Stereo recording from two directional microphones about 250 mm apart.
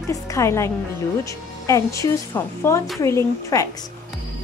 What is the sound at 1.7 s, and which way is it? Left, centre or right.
A woman's voice, centre.